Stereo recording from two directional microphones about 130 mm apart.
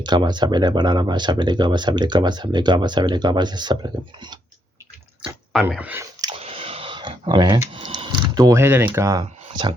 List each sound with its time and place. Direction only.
0.0 s speech: 35° right (ahead or behind)
5.8 s speech: 15° right (ahead or behind)
6.4 s a sound: 45° right (ahead or behind)
7.7 s speech: 40° right (ahead or behind)